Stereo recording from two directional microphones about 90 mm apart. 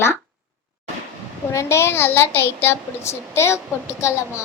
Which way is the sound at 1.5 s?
30° left (ahead or behind).